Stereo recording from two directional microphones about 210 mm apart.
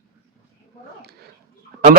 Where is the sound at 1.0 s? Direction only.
50° right (ahead or behind).